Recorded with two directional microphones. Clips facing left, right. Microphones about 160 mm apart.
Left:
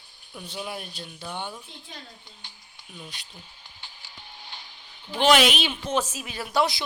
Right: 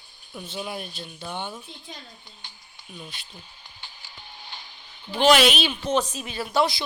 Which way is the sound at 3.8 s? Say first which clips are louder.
Right 1 dB; 50° right (ahead or behind).